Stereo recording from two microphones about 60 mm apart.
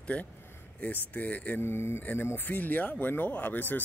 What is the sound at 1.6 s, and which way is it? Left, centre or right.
Speech, left.